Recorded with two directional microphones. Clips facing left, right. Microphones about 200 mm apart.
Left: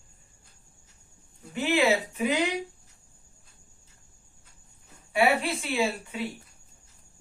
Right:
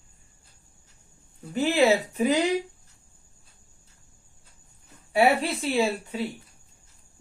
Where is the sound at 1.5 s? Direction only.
35° right (ahead or behind).